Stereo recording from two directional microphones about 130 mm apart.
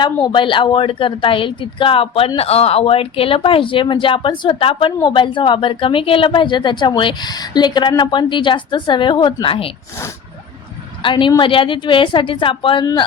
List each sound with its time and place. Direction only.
0.3 s a woman's voice: 40° left (ahead or behind)
11.0 s a woman's voice: 40° left (ahead or behind)